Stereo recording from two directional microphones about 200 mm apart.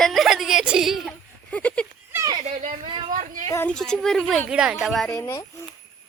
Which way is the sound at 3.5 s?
10° left (ahead or behind).